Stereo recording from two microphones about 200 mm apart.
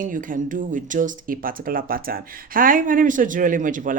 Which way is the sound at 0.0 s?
40° right (ahead or behind).